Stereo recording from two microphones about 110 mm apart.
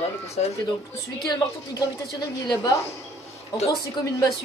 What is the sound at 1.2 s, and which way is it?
A woman's voice, 35° left (ahead or behind).